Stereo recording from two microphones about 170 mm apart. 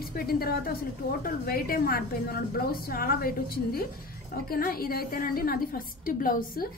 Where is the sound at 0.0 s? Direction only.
60° left (ahead or behind).